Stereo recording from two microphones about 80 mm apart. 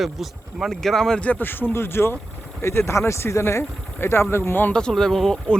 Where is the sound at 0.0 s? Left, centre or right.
Centre.